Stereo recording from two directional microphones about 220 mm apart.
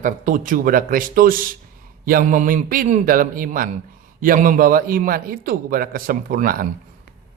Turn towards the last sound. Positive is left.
turn(degrees=-40)  # may be behind; listen again after turning